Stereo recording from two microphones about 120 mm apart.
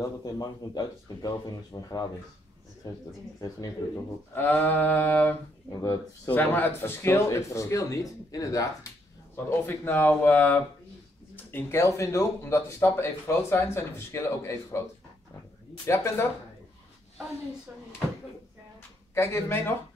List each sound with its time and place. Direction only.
0.0 s speech: 30° left (ahead or behind)
3.3 s speech: 30° left (ahead or behind); by 5.3 s 15° left (ahead or behind)
5.7 s speech: 30° left (ahead or behind)
6.3 s speech: 15° left (ahead or behind)
15.9 s speech: 20° left (ahead or behind)
19.1 s speech: 20° left (ahead or behind)